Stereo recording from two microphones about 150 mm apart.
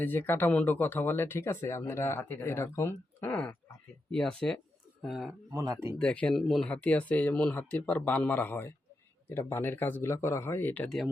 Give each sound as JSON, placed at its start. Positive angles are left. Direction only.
{"t": 0.0, "sound": "speech", "side_deg": 10}
{"t": 5.5, "sound": "speech", "side_deg": -20}
{"t": 6.0, "sound": "speech", "side_deg": 5}